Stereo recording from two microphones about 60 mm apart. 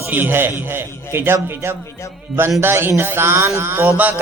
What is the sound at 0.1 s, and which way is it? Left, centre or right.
A man's voice, right.